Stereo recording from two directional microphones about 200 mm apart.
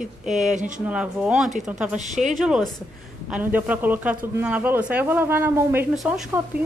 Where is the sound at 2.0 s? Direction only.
35° right (ahead or behind).